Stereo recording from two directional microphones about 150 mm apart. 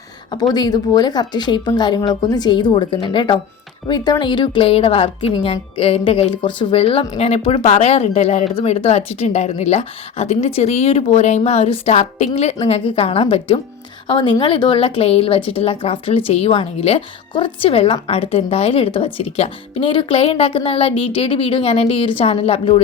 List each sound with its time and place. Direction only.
0.5 s a woman's voice: 25° left (ahead or behind)